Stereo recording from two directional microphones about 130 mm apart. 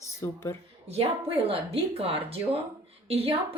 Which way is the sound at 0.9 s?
50° right (ahead or behind).